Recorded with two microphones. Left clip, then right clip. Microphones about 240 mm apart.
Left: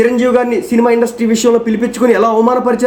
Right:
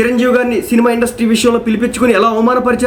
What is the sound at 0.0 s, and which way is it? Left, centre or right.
A man's voice, centre.